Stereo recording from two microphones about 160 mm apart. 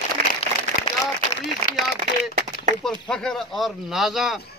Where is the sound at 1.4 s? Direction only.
85° left.